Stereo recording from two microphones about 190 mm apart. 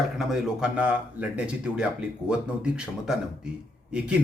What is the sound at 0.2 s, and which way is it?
Speech, 5° right (ahead or behind).